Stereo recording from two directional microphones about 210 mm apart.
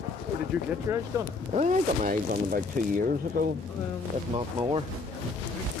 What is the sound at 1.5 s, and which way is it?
Speech, 35° right (ahead or behind).